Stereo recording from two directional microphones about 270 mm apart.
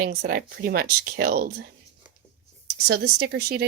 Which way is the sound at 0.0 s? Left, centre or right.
Right.